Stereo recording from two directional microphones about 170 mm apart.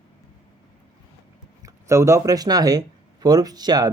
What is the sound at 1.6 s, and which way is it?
Speech, 15° right (ahead or behind).